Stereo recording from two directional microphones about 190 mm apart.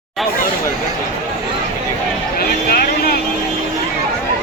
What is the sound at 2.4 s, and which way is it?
Vehicle, 55° left (ahead or behind).